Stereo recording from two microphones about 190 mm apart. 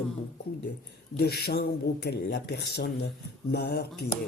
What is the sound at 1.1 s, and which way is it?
Speech, 60° left (ahead or behind).